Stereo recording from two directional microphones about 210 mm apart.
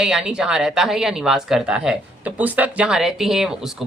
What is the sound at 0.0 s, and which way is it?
Speech, 5° right (ahead or behind).